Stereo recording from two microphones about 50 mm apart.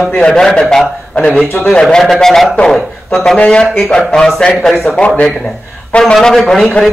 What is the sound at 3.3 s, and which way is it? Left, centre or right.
Speech, centre.